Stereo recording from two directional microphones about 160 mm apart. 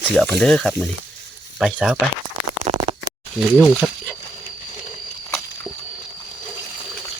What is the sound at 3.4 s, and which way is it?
Speech, centre (ahead or behind).